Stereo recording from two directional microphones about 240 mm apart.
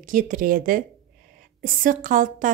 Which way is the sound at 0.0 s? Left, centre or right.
Right.